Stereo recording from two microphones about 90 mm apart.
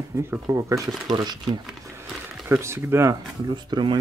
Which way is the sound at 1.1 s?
55° right (ahead or behind).